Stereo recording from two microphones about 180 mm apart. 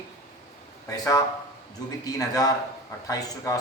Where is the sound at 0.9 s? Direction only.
20° left (ahead or behind).